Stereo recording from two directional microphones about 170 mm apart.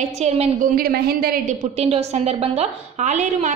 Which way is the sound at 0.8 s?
65° right (ahead or behind).